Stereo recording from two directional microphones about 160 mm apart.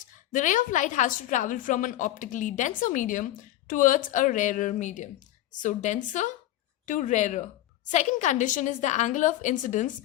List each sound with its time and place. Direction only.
0.3 s a woman's voice: 50° left (ahead or behind)